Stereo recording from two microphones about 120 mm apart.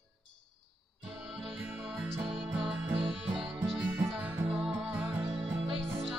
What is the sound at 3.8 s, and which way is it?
Music, 15° right (ahead or behind).